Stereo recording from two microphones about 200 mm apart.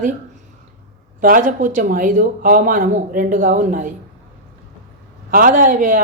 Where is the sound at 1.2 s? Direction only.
45° right (ahead or behind).